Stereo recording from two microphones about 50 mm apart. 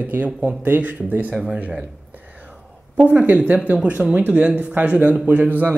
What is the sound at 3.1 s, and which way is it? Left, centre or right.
Speech, right.